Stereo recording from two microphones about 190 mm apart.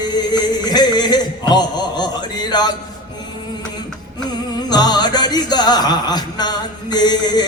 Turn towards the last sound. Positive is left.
turn(degrees=20)  # may be behind; listen again after turning